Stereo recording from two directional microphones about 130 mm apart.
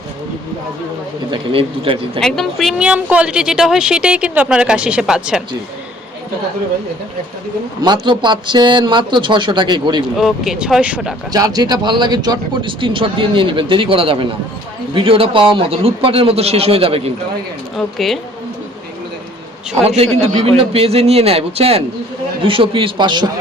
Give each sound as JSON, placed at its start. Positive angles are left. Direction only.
{"t": 1.3, "sound": "a man's voice", "side_deg": -45}
{"t": 2.2, "sound": "a woman's voice", "side_deg": 5}
{"t": 8.0, "sound": "speech", "side_deg": -35}
{"t": 10.2, "sound": "speech", "side_deg": -5}
{"t": 11.3, "sound": "a man's voice", "side_deg": -30}
{"t": 17.7, "sound": "speech", "side_deg": 0}
{"t": 20.4, "sound": "a man's voice", "side_deg": -50}